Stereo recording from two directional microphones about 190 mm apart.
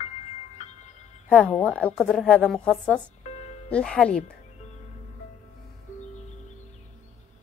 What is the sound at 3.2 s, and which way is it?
Music, 35° left (ahead or behind).